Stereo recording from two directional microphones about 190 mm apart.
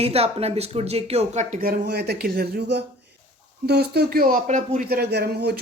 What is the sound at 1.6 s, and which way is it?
Speech, 60° right (ahead or behind).